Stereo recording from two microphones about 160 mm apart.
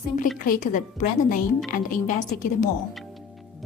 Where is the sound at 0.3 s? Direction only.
55° left (ahead or behind).